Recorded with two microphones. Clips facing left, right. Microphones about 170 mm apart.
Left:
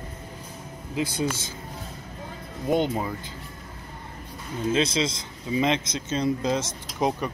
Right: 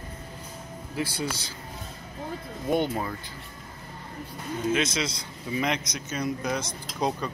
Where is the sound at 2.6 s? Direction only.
15° left (ahead or behind).